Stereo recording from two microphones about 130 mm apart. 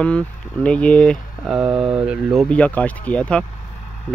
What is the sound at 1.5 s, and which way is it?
Speech, 10° right (ahead or behind).